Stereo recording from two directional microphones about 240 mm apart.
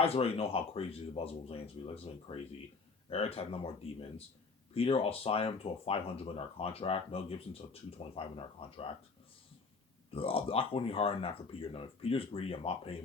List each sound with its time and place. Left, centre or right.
0.0 s speech: left
4.7 s speech: left
10.1 s speech: left